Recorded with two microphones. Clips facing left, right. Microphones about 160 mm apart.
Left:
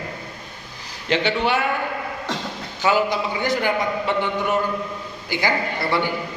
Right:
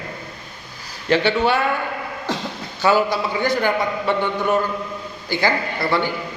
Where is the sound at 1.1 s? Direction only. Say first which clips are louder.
Right 3 dB; 15° left (ahead or behind).